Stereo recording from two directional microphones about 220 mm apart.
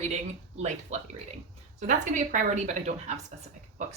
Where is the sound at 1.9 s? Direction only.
35° right (ahead or behind).